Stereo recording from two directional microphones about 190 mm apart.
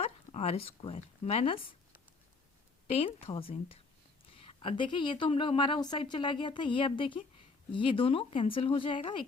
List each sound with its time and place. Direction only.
0.3 s speech: 30° left (ahead or behind)
2.8 s a woman's voice: 30° left (ahead or behind)